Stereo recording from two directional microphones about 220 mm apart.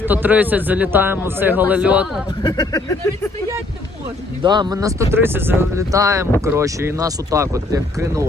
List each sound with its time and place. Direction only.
0.0 s speech: 10° right (ahead or behind)
2.4 s speech: 20° left (ahead or behind)
4.4 s speech: 20° right (ahead or behind)